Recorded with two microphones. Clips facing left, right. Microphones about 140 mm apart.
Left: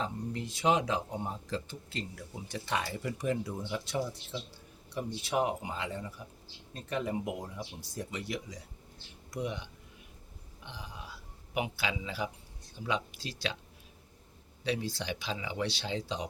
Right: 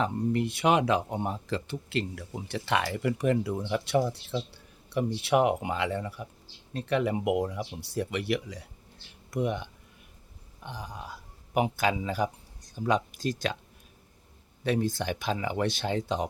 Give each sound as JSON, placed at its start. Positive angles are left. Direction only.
{"t": 0.0, "sound": "speech", "side_deg": -65}
{"t": 9.3, "sound": "speech", "side_deg": -55}
{"t": 10.7, "sound": "a man's voice", "side_deg": -45}
{"t": 14.6, "sound": "speech", "side_deg": -50}